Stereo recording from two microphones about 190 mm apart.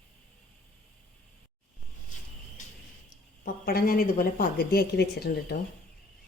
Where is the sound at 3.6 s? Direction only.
50° left (ahead or behind).